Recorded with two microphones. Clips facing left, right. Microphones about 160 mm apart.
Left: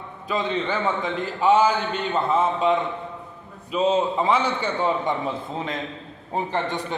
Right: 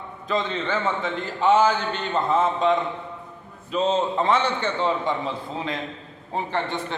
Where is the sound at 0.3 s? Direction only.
15° left (ahead or behind).